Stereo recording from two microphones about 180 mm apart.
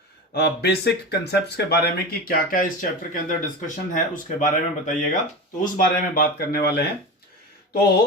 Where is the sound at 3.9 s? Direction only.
50° left (ahead or behind).